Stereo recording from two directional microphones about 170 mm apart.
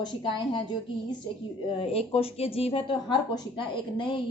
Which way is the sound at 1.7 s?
35° left (ahead or behind).